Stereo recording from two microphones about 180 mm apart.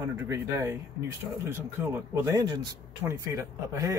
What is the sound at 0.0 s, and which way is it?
A man's voice, 15° right (ahead or behind).